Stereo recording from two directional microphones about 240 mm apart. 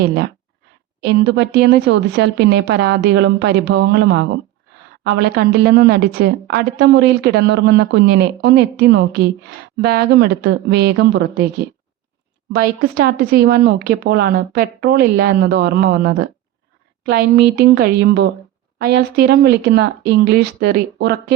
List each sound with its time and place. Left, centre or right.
0.0 s a woman's voice: right
12.5 s a woman's voice: right